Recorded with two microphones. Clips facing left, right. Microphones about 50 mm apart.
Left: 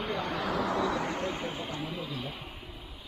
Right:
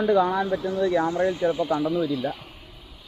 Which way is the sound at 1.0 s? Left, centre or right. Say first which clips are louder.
Right 11 dB; left.